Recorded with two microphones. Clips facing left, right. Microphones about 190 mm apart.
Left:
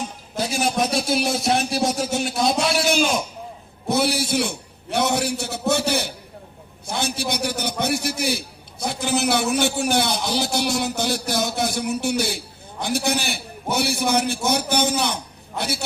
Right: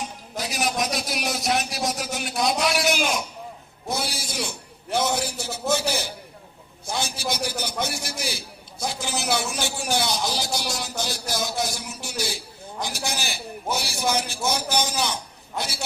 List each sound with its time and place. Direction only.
0.3 s speech: 30° left (ahead or behind)
3.8 s a man's voice: 65° left (ahead or behind)